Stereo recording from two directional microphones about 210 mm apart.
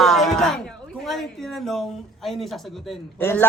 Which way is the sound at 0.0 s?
Centre (ahead or behind).